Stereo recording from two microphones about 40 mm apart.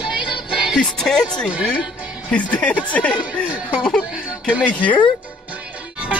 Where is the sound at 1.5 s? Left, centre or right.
Right.